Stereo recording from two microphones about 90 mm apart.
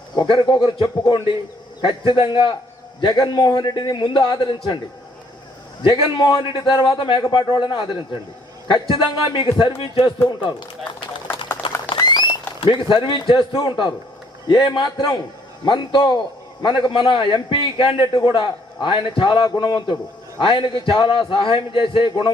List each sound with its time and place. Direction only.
0.2 s a man's voice: 60° left (ahead or behind)
3.0 s a man's voice: 50° left (ahead or behind)
5.9 s a man's voice: 55° left (ahead or behind); by 10.1 s 70° left (ahead or behind)
10.2 s a man's voice: 60° left (ahead or behind)
11.6 s a sound: 70° left (ahead or behind)
11.9 s a sound: 50° left (ahead or behind)
12.5 s a man's voice: 70° left (ahead or behind); by 15.2 s 50° left (ahead or behind)
15.6 s a man's voice: 60° left (ahead or behind)